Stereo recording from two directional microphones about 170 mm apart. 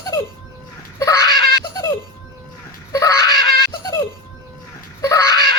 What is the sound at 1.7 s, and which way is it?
Music, 20° left (ahead or behind).